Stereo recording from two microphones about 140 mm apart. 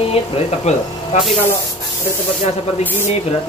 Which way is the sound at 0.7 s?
50° left (ahead or behind).